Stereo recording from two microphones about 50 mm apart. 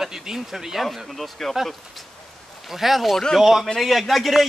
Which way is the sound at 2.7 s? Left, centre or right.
Centre.